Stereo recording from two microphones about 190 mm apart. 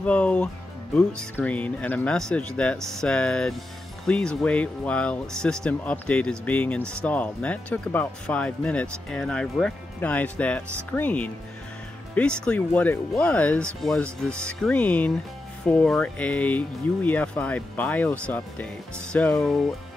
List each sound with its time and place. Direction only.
0.0 s speech: 5° left (ahead or behind)